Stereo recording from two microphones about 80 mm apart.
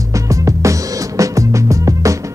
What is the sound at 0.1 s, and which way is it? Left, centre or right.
Music, right.